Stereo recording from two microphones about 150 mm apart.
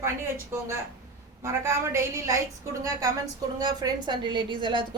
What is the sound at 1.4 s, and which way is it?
A man's voice, 20° right (ahead or behind).